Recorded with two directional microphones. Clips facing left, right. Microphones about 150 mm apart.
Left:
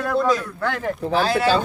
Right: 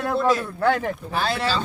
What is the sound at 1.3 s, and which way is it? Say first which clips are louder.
Speech: left 8 dB; 55° left (ahead or behind).